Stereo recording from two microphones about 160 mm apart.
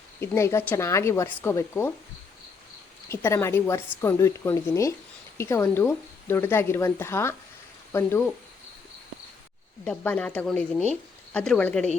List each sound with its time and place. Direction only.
0.2 s speech: 15° left (ahead or behind)
3.1 s speech: 15° left (ahead or behind)
9.8 s speech: 10° left (ahead or behind)